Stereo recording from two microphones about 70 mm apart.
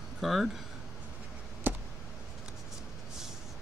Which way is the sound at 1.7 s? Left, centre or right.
Right.